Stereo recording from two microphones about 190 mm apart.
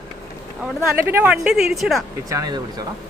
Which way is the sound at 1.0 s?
10° right (ahead or behind).